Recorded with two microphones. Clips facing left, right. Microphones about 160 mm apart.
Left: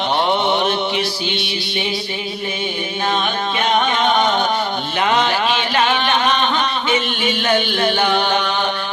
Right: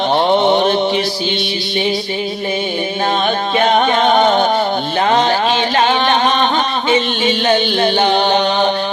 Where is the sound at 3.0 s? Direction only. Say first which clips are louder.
Right 3 dB; 35° right (ahead or behind).